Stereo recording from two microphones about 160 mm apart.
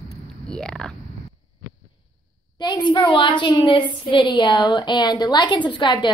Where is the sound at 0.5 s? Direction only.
5° left (ahead or behind).